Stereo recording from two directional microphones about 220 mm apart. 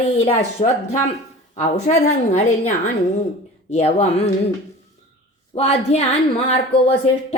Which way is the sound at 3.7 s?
30° left (ahead or behind).